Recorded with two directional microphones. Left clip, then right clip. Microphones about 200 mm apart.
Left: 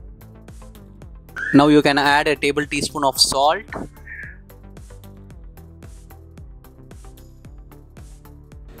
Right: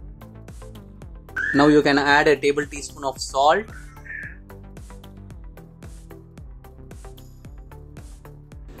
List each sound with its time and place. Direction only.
0.3 s music: centre (ahead or behind)
1.5 s speech: 45° left (ahead or behind)
4.2 s music: centre (ahead or behind)